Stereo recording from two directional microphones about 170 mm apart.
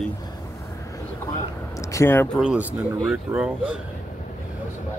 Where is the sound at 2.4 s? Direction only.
5° right (ahead or behind).